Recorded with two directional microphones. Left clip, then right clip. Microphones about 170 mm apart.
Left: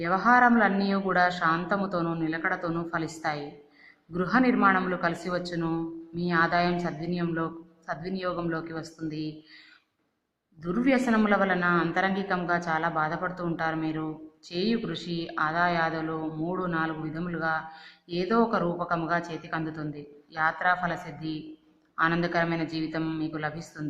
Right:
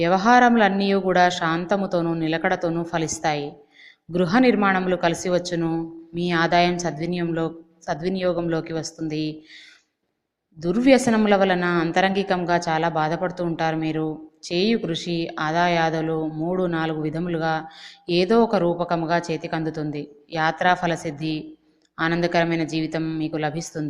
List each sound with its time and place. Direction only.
0.0 s speech: 35° right (ahead or behind)
10.6 s speech: 35° right (ahead or behind)